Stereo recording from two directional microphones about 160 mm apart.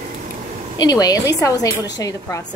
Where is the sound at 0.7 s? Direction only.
25° left (ahead or behind).